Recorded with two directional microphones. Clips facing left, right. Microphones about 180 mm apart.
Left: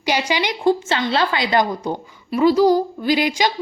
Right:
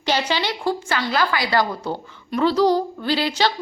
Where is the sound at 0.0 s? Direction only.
10° left (ahead or behind).